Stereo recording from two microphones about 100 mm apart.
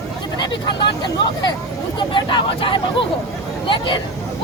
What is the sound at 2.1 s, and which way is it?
Speech, 55° left (ahead or behind).